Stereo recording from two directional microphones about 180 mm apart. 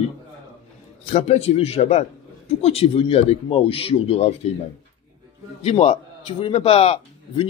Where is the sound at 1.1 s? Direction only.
35° left (ahead or behind).